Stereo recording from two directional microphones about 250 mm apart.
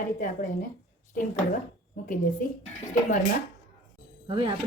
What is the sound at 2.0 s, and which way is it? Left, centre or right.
Speech, left.